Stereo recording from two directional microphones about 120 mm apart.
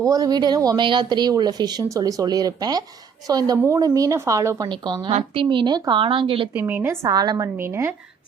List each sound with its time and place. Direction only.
0.0 s a woman's voice: 30° right (ahead or behind)
5.3 s speech: 45° right (ahead or behind)
6.0 s speech: 50° right (ahead or behind)
6.5 s a woman's voice: 15° right (ahead or behind)
7.1 s speech: 35° right (ahead or behind)
7.6 s a woman's voice: 20° right (ahead or behind)